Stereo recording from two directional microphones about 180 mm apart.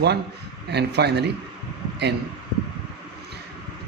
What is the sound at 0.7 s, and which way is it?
Speech, 65° right (ahead or behind).